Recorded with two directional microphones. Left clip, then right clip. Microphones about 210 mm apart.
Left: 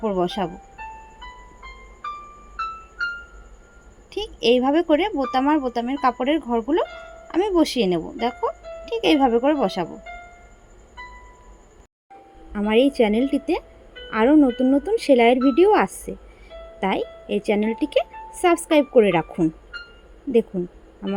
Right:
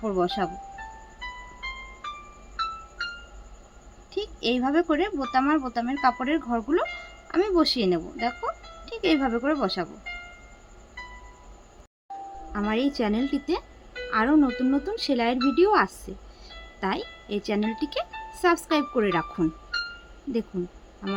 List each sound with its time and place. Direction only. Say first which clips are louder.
0.0 s speech: left 3 dB; 10° left (ahead or behind)
4.1 s speech: left 8 dB; 15° left (ahead or behind)
12.5 s speech: left 9 dB; 15° left (ahead or behind)
21.0 s speech: left 3 dB; 10° left (ahead or behind)